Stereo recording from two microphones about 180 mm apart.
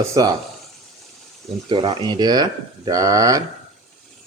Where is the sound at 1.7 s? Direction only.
25° right (ahead or behind).